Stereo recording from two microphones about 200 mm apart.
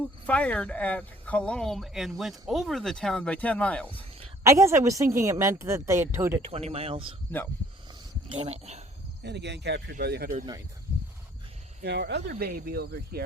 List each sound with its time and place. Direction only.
0.0 s speech: 5° left (ahead or behind)
3.8 s a sound: 25° right (ahead or behind)
4.4 s a woman's voice: 15° right (ahead or behind)
6.5 s speech: 30° right (ahead or behind)
8.3 s speech: 30° right (ahead or behind)
9.2 s speech: 60° right (ahead or behind)
11.8 s speech: 55° right (ahead or behind)
12.3 s speech: 45° right (ahead or behind)